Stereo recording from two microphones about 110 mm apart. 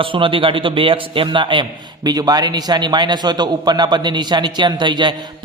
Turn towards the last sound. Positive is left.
turn(degrees=-45)  # may be behind; listen again after turning